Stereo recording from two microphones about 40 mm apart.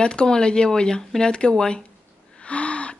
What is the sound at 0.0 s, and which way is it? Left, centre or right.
Speech, left.